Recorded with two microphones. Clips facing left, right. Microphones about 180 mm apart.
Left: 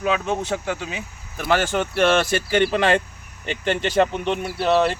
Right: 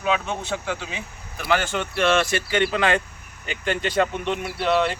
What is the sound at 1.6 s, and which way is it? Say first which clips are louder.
Speech: left 3 dB; 40° left (ahead or behind).